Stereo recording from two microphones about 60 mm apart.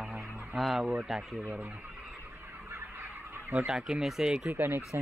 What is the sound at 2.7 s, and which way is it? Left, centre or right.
Fowl, right.